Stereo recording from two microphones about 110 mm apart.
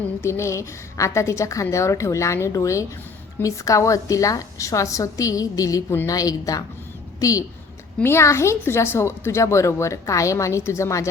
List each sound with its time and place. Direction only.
0.2 s a woman's voice: 25° left (ahead or behind)